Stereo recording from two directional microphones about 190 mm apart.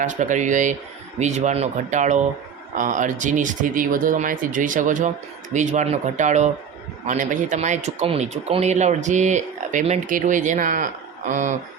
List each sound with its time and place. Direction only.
0.0 s speech: 40° right (ahead or behind)